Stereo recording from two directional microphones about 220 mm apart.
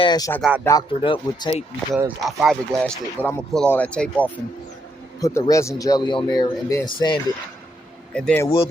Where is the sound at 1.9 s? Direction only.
10° right (ahead or behind).